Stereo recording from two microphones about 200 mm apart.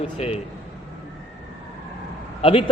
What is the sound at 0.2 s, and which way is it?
Speech, 30° left (ahead or behind).